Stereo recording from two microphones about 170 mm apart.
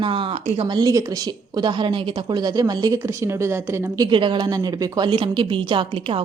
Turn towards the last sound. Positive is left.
turn(degrees=-30)  # may be behind; listen again after turning